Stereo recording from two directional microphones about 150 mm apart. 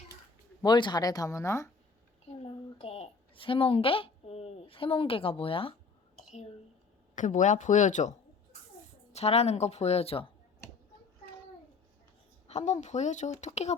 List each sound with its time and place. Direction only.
0.6 s speech: 30° left (ahead or behind)
2.4 s speech: 40° left (ahead or behind)
7.2 s speech: 55° left (ahead or behind)
9.1 s a woman's voice: 45° left (ahead or behind)
12.5 s a woman's voice: 50° left (ahead or behind)